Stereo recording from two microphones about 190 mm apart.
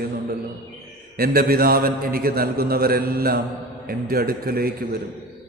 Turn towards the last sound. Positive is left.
turn(degrees=-55)  # may be behind; listen again after turning